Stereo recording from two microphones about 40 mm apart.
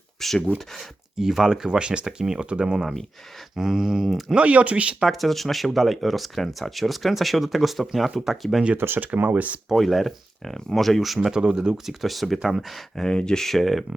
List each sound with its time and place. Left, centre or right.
0.2 s speech: centre
1.2 s speech: centre
4.4 s speech: right
5.0 s speech: centre
8.8 s speech: right
9.3 s speech: right
9.7 s speech: centre
11.3 s speech: centre
12.0 s speech: centre
13.0 s speech: left
13.4 s speech: centre